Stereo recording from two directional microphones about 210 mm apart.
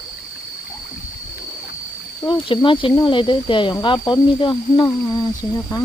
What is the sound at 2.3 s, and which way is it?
Speech, 25° left (ahead or behind).